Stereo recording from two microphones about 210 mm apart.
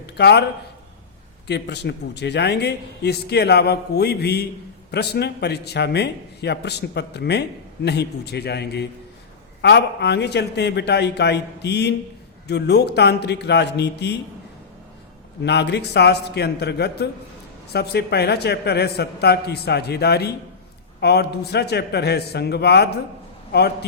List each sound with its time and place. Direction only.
0.2 s a man's voice: 50° left (ahead or behind)
1.5 s a man's voice: 55° left (ahead or behind)
15.4 s a man's voice: 55° left (ahead or behind)